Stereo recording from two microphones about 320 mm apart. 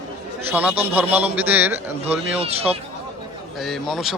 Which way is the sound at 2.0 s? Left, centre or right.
Centre.